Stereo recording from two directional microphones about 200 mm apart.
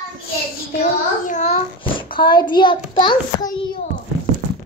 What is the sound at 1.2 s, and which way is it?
Speech, 35° left (ahead or behind).